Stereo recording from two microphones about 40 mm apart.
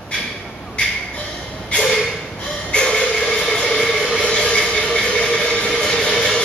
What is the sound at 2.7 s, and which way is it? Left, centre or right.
Music, centre.